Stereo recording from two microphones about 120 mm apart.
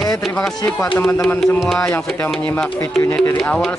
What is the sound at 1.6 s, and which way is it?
Speech, 5° left (ahead or behind).